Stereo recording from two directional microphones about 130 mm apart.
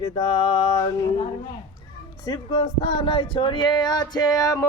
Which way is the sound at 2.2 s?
30° left (ahead or behind).